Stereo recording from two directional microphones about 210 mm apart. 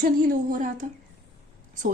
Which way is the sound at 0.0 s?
40° right (ahead or behind).